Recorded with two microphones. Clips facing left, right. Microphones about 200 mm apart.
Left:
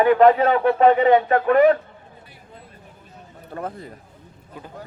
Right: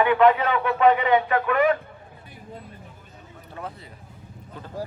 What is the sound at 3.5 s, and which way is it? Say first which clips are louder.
Speech: left 6 dB; 50° left (ahead or behind).